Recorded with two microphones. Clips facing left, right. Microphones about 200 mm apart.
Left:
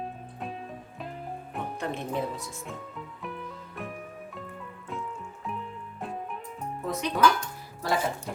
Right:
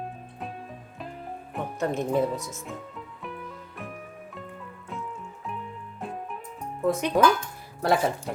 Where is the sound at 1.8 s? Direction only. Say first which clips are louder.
Right 7 dB; 45° right (ahead or behind).